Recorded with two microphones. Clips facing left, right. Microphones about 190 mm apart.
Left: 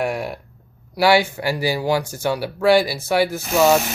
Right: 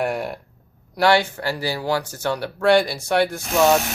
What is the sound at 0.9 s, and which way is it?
Speech, 10° left (ahead or behind).